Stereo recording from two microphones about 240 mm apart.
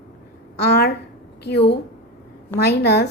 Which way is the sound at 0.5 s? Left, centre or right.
Left.